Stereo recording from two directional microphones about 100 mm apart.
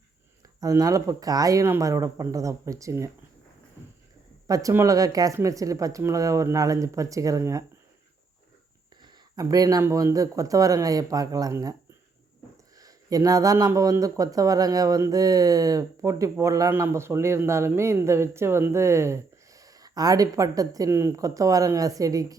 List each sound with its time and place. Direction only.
0.6 s speech: 35° right (ahead or behind)
4.4 s speech: 35° right (ahead or behind)
9.0 s a sound: 40° right (ahead or behind)
9.8 s speech: 35° right (ahead or behind)
12.7 s a sound: 35° right (ahead or behind)
13.7 s speech: 30° right (ahead or behind)